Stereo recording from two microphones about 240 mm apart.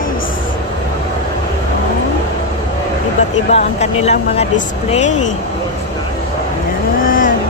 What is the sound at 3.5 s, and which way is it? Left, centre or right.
Speech, left.